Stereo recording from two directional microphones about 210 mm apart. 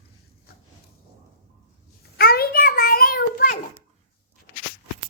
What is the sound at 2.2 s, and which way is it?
Child singing, 45° left (ahead or behind).